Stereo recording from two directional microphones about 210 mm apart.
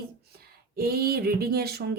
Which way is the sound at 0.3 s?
45° right (ahead or behind).